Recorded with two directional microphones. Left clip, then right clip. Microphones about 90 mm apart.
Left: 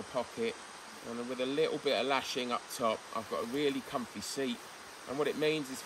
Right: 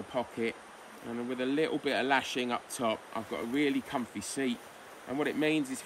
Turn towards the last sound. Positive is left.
turn(degrees=25)  # may be behind; listen again after turning